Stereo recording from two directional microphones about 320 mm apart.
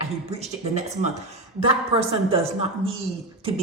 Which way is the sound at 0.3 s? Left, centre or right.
Centre.